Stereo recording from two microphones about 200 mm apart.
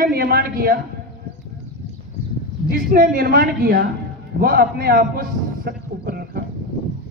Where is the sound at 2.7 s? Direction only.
45° right (ahead or behind).